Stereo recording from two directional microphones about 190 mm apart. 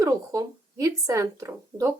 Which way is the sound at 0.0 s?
15° right (ahead or behind).